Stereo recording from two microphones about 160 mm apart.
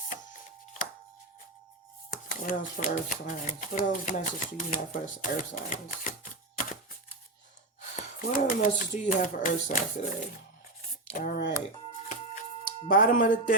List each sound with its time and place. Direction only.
2.3 s speech: 55° left (ahead or behind)
7.8 s speech: 55° left (ahead or behind)
11.3 s speech: 80° left
12.0 s a sound: 50° left (ahead or behind)